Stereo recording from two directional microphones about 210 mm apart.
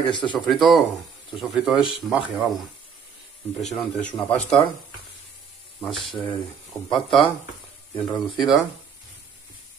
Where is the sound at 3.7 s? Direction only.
5° left (ahead or behind).